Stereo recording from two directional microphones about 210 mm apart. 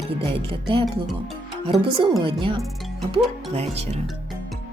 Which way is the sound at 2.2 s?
25° right (ahead or behind).